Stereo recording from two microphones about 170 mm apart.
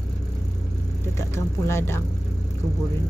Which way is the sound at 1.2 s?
15° left (ahead or behind).